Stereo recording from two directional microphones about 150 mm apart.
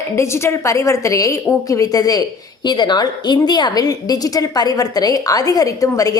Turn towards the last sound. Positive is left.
turn(degrees=20)  # may be behind; listen again after turning